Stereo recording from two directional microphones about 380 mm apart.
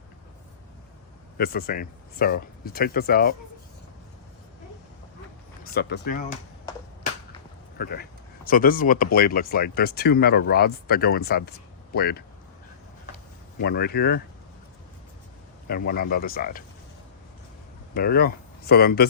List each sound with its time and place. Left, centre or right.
1.4 s speech: left
5.7 s speech: left
7.8 s speech: left
13.6 s speech: left
15.6 s speech: left
17.9 s speech: left